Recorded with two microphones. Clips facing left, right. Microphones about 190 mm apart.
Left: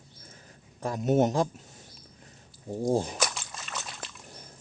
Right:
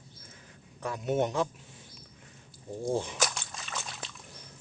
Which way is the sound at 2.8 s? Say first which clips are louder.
Left 4 dB; 40° left (ahead or behind).